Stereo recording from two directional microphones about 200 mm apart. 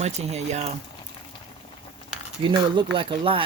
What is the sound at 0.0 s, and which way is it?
Speech, 35° right (ahead or behind).